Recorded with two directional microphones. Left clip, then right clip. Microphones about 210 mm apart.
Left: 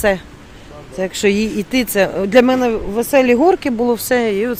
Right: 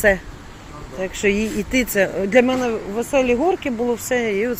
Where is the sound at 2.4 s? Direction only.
30° left (ahead or behind).